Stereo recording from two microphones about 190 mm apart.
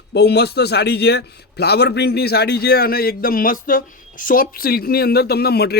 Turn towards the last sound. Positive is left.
turn(degrees=55)  # may be behind; listen again after turning